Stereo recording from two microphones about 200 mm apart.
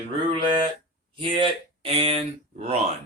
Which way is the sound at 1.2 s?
25° right (ahead or behind).